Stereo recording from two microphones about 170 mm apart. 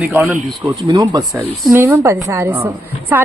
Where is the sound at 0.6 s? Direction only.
20° right (ahead or behind).